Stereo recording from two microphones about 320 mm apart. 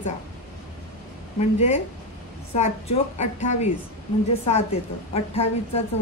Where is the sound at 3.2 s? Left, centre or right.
Left.